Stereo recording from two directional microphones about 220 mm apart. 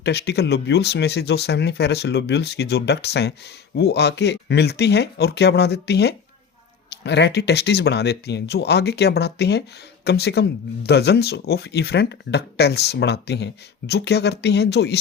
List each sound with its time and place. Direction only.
0.0 s speech: 50° left (ahead or behind)